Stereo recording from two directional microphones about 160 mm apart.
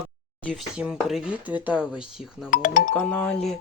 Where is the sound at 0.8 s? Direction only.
5° right (ahead or behind).